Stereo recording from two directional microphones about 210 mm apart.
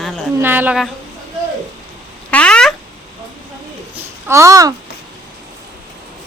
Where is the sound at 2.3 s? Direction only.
5° left (ahead or behind).